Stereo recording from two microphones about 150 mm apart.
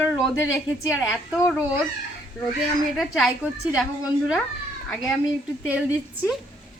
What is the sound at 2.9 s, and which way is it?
A child's voice, centre (ahead or behind).